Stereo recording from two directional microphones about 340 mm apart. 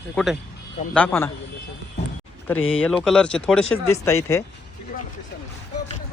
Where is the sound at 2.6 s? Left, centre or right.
Left.